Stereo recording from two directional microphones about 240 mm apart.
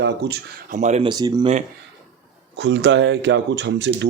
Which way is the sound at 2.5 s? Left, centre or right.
Right.